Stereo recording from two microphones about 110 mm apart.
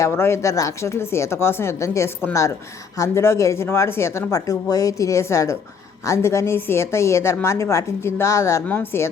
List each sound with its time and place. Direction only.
0.0 s speech: 25° left (ahead or behind)